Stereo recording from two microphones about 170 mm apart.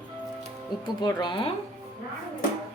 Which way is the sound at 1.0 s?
25° left (ahead or behind).